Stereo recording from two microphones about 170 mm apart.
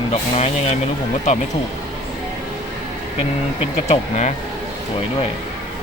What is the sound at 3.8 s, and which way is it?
Speech, 40° left (ahead or behind).